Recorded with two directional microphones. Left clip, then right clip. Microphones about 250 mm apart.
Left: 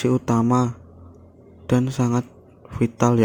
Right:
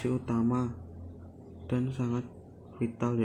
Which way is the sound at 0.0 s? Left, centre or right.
Left.